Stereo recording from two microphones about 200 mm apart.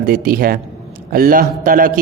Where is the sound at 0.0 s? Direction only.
45° right (ahead or behind).